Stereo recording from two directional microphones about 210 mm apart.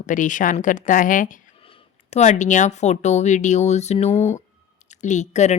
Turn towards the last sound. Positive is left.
turn(degrees=35)  # may be behind; listen again after turning